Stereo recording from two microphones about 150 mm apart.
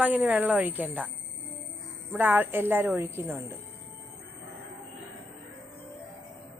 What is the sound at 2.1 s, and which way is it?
A woman's voice, 10° right (ahead or behind).